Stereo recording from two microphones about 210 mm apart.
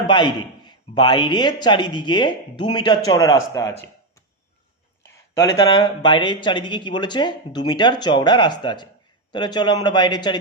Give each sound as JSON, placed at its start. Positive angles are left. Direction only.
{"t": 0.1, "sound": "a man's voice", "side_deg": 20}
{"t": 5.0, "sound": "speech", "side_deg": 15}